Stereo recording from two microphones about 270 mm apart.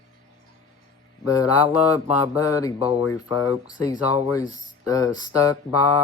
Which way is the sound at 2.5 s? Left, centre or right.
Centre.